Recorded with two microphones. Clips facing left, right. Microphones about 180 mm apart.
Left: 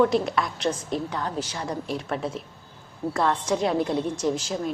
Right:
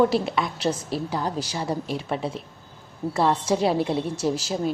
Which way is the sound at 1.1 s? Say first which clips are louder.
Right 2 dB; 35° right (ahead or behind).